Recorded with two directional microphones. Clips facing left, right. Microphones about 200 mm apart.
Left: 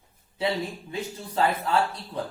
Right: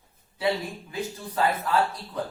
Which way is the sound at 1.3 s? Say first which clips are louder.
Even; 25° left (ahead or behind).